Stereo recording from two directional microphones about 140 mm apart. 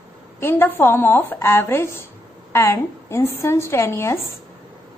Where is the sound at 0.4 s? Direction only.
15° left (ahead or behind).